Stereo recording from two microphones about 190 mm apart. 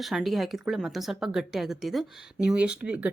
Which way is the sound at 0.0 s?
Centre (ahead or behind).